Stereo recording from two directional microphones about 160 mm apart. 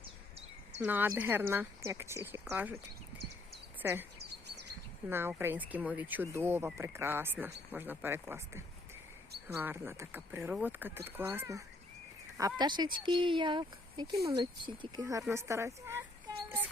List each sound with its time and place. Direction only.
0.0 s a sound: 40° right (ahead or behind)
0.8 s speech: 10° right (ahead or behind)
3.8 s speech: 15° right (ahead or behind)
5.0 s speech: 15° right (ahead or behind)